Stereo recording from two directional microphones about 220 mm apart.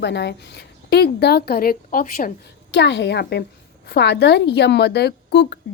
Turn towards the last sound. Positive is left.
turn(degrees=50)  # may be behind; listen again after turning